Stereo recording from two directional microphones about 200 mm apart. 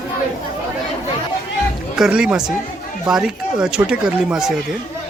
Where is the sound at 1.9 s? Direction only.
5° right (ahead or behind).